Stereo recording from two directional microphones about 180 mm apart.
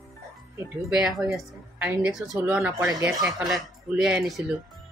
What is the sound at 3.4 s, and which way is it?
Speech, centre (ahead or behind).